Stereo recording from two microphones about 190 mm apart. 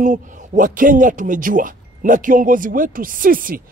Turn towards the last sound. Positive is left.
turn(degrees=-45)  # may be behind; listen again after turning